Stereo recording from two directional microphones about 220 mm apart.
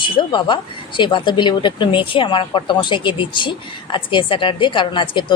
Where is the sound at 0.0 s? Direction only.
20° left (ahead or behind).